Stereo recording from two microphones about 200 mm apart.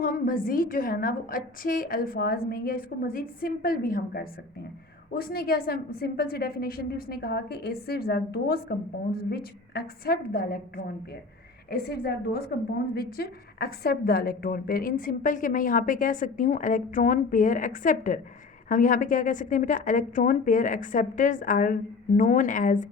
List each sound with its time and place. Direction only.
0.0 s a woman's voice: 45° left (ahead or behind)